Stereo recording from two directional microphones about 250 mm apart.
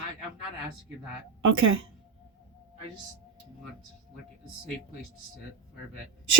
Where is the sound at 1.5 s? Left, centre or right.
Right.